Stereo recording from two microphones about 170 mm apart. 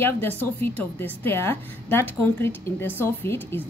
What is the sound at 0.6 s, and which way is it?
A woman's voice, 10° left (ahead or behind).